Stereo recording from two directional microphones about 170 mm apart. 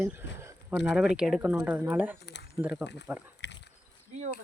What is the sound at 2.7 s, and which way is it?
Speech, 90° left.